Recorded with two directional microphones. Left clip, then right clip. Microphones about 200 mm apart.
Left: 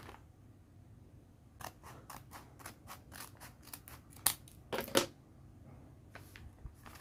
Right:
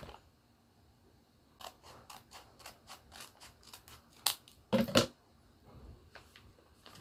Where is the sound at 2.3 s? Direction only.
35° left (ahead or behind).